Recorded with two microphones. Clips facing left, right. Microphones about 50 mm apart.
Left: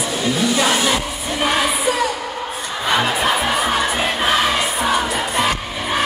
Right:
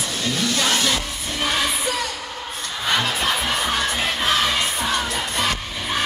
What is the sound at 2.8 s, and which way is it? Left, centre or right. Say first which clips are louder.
Crowd: left 4 dB; centre.